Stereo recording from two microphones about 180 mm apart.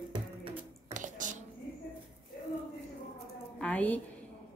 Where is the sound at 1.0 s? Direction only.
45° right (ahead or behind).